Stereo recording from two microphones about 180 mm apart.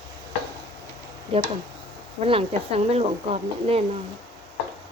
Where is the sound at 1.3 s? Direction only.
30° right (ahead or behind).